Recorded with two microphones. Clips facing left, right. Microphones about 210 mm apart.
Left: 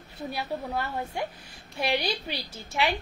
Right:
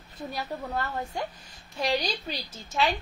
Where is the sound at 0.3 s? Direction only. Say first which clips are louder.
Left 1 dB; 10° left (ahead or behind).